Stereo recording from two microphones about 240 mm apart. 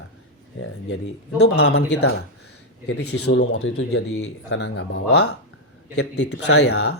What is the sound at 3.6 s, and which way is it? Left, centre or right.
Speech, left.